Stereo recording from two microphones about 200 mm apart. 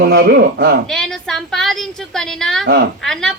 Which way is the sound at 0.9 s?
Centre (ahead or behind).